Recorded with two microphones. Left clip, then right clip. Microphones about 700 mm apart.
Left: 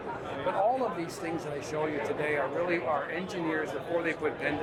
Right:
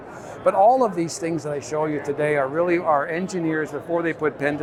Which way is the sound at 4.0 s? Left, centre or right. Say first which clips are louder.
Right 8 dB; right.